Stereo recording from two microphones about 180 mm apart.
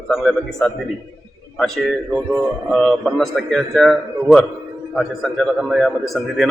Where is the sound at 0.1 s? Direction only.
Centre (ahead or behind).